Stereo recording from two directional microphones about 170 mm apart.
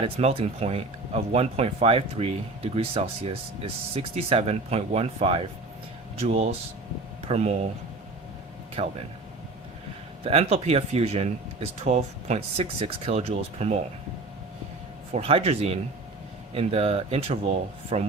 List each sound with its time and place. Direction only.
0.0 s speech: 35° right (ahead or behind)
8.8 s speech: 35° right (ahead or behind)
10.2 s speech: 35° right (ahead or behind)
15.1 s speech: 35° right (ahead or behind)